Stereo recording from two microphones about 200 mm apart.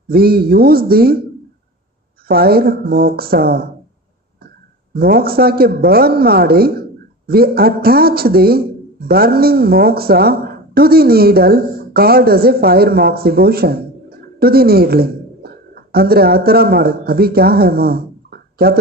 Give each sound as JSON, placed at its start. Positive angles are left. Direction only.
{"t": 0.1, "sound": "speech", "side_deg": -50}
{"t": 2.2, "sound": "speech", "side_deg": -50}
{"t": 4.9, "sound": "a woman's voice", "side_deg": -50}